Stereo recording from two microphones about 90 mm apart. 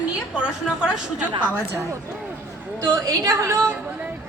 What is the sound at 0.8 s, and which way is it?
Speech, 10° right (ahead or behind).